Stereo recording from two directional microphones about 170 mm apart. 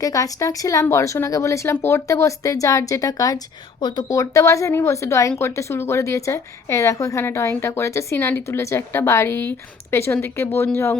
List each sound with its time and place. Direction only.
0.0 s a woman's voice: 20° left (ahead or behind)